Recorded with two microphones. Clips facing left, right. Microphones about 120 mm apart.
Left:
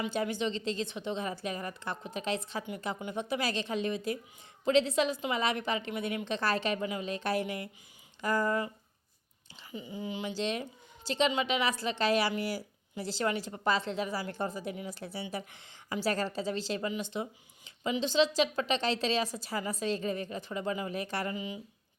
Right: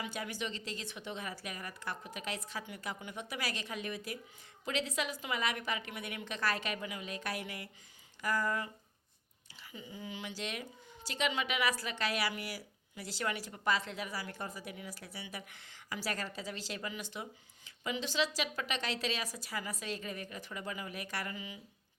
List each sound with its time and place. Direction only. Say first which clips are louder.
0.0 s a woman's voice: left 8 dB; 25° left (ahead or behind)
9.7 s a woman's voice: left 7 dB; 20° left (ahead or behind)